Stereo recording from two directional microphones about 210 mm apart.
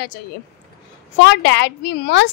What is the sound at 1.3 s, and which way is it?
A woman's voice, 55° left (ahead or behind).